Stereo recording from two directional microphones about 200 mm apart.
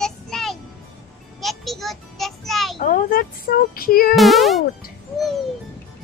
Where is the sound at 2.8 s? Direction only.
45° left (ahead or behind).